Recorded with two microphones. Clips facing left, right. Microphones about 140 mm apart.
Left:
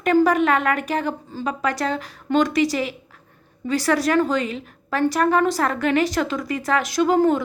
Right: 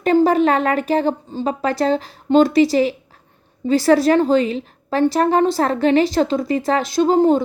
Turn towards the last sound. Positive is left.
turn(degrees=-30)  # may be behind; listen again after turning